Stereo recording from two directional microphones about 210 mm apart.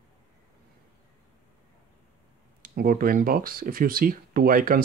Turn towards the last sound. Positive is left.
turn(degrees=-40)  # may be behind; listen again after turning